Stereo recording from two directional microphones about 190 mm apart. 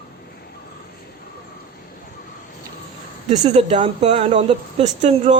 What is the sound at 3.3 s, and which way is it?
Speech, 35° right (ahead or behind).